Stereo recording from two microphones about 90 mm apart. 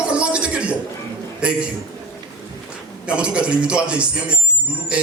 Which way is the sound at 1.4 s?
10° right (ahead or behind).